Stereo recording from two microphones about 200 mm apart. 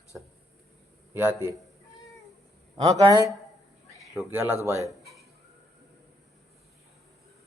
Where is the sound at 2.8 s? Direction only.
20° right (ahead or behind).